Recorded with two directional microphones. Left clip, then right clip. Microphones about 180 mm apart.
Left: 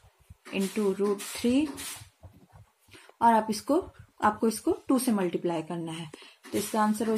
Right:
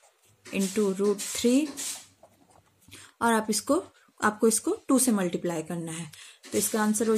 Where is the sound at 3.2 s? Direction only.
35° right (ahead or behind).